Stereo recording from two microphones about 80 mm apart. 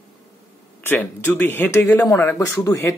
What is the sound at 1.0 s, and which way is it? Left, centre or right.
Speech, left.